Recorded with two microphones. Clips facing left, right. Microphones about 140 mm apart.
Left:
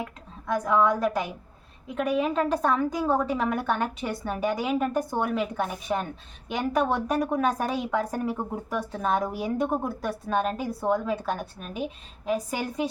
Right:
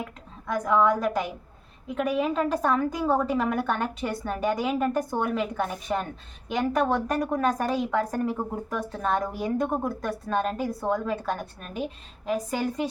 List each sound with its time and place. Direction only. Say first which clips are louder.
0.0 s a woman's voice: left 1 dB; centre (ahead or behind)